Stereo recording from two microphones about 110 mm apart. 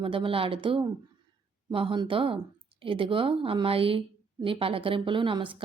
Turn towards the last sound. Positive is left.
turn(degrees=-50)  # may be behind; listen again after turning